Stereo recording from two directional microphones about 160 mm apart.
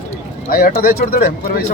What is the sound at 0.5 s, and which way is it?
Speech, 70° left (ahead or behind).